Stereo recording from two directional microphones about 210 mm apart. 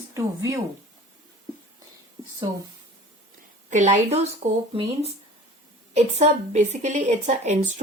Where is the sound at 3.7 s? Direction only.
35° right (ahead or behind).